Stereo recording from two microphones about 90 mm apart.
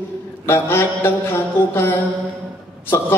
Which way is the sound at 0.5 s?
25° left (ahead or behind).